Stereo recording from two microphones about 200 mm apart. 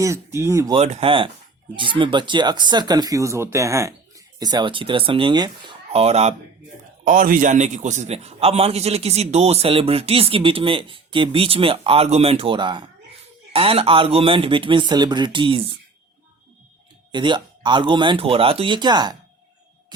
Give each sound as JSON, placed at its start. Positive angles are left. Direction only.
{"t": 0.0, "sound": "speech", "side_deg": -15}
{"t": 0.8, "sound": "a man's voice", "side_deg": -30}
{"t": 7.0, "sound": "a man's voice", "side_deg": -45}
{"t": 17.1, "sound": "a man's voice", "side_deg": -25}